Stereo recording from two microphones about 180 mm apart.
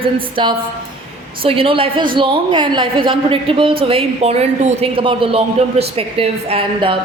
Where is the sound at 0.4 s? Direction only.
25° right (ahead or behind).